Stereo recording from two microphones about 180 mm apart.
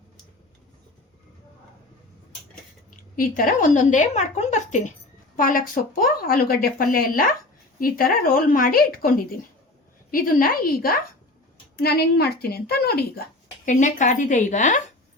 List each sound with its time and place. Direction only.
3.2 s a woman's voice: 50° left (ahead or behind)
13.7 s speech: 45° left (ahead or behind)